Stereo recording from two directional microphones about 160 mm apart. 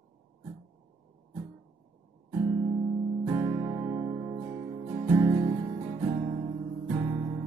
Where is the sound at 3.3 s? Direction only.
15° right (ahead or behind).